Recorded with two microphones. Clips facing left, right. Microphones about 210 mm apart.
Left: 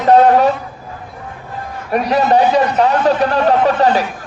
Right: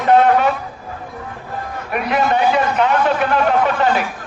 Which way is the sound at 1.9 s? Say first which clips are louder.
Left 4 dB; 35° left (ahead or behind).